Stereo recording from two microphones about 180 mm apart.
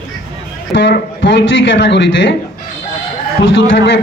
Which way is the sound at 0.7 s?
90° left.